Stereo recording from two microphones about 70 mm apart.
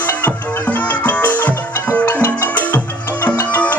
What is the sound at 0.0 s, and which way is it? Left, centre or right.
Music, left.